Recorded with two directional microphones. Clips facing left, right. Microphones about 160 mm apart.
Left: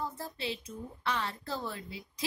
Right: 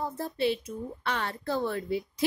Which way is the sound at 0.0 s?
60° right (ahead or behind).